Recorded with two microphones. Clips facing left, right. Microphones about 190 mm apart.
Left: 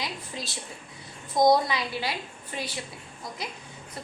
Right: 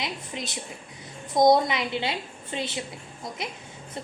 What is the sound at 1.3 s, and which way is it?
A woman's voice, 20° right (ahead or behind).